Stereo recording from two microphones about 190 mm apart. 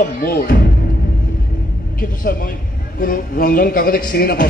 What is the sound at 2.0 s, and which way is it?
A man's voice, 50° left (ahead or behind).